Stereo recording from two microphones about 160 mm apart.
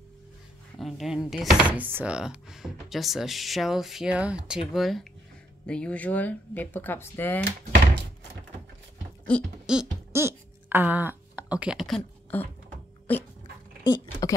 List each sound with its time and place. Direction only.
0.7 s speech: centre (ahead or behind)
9.3 s speech: 5° left (ahead or behind)
9.7 s speech: 5° right (ahead or behind)
10.1 s a sound: 15° right (ahead or behind)
12.3 s speech: 10° left (ahead or behind)
14.2 s speech: 20° left (ahead or behind)